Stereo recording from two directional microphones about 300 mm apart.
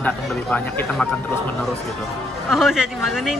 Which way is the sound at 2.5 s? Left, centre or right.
Centre.